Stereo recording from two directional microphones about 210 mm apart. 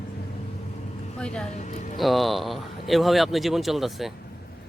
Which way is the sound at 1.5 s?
35° left (ahead or behind).